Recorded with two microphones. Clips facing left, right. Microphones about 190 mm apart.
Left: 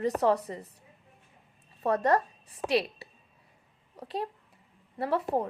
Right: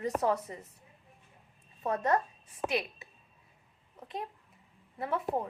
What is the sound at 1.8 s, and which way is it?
A woman's voice, 35° left (ahead or behind).